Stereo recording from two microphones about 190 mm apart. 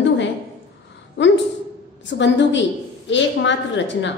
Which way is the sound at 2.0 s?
70° left (ahead or behind).